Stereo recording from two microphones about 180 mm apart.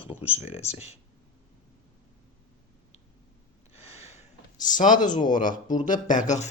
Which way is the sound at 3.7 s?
35° left (ahead or behind).